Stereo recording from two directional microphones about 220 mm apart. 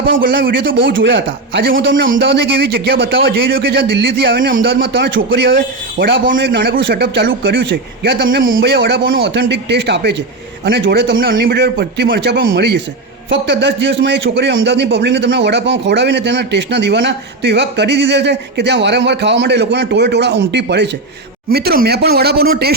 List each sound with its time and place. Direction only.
0.2 s a man's voice: 40° right (ahead or behind); by 5.5 s 60° right (ahead or behind)
6.3 s speech: 45° right (ahead or behind)